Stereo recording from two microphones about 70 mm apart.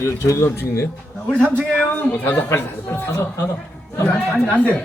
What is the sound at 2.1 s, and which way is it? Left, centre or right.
Speech, left.